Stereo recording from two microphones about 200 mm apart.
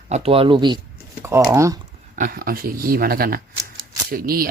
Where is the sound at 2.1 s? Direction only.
45° right (ahead or behind).